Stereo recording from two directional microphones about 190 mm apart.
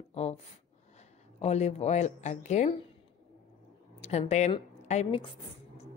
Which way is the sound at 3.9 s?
35° left (ahead or behind).